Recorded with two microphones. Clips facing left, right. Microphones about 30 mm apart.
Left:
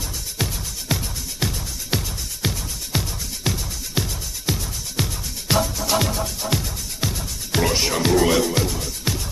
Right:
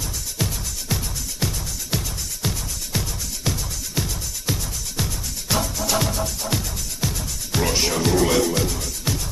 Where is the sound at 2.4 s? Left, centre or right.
Left.